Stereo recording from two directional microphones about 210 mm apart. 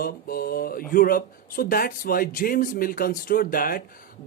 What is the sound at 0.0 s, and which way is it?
Speech, 45° left (ahead or behind).